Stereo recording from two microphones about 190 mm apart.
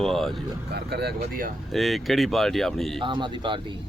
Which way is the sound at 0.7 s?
60° right (ahead or behind).